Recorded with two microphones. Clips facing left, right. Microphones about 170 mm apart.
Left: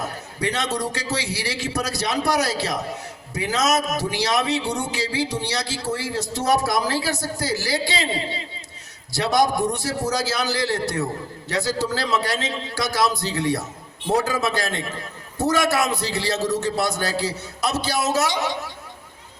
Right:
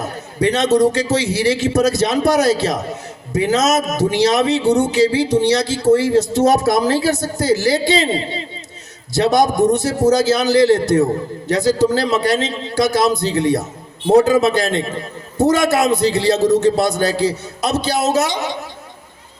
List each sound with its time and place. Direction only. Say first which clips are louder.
0.4 s a man's voice: right 11 dB; 20° right (ahead or behind)
9.1 s a man's voice: right 6 dB; 20° right (ahead or behind)